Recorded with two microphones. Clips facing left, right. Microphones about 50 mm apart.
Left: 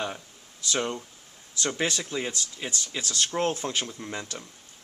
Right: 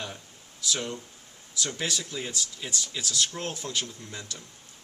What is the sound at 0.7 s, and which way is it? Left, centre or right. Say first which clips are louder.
Speech: left 3 dB; left.